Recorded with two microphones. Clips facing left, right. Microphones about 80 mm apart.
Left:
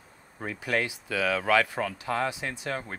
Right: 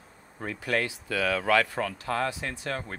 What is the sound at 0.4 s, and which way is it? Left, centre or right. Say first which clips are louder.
Speech: even; centre.